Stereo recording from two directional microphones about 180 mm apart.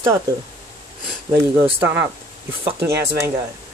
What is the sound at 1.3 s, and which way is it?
Speech, 15° right (ahead or behind).